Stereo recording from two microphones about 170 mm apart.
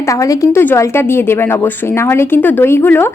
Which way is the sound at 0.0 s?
20° left (ahead or behind).